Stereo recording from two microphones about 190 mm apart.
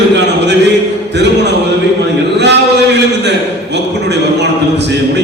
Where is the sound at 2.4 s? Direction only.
65° right (ahead or behind).